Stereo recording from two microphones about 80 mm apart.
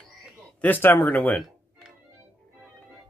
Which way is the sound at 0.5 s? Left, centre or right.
Left.